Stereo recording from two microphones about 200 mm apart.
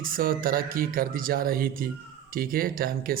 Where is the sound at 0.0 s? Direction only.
45° right (ahead or behind).